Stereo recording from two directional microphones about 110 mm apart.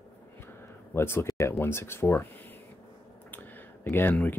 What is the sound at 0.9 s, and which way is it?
Speech, 20° left (ahead or behind).